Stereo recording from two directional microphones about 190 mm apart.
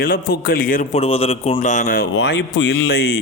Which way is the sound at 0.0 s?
50° left (ahead or behind).